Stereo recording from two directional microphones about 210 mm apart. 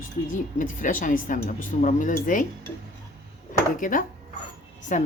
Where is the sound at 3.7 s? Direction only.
40° left (ahead or behind).